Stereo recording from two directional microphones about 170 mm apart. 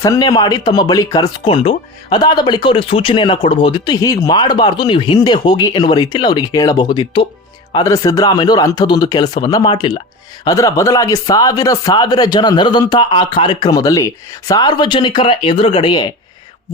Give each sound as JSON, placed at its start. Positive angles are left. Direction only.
{"t": 0.0, "sound": "speech", "side_deg": 20}